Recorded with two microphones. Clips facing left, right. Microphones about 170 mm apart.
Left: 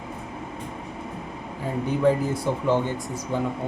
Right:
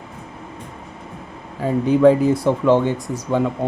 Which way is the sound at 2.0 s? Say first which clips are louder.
Right 8 dB; 90° right.